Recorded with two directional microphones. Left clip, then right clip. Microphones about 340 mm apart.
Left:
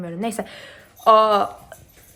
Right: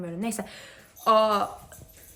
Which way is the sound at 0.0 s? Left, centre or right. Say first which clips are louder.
Left 6 dB; centre.